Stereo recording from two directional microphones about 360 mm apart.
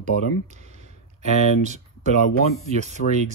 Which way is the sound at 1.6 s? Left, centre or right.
Centre.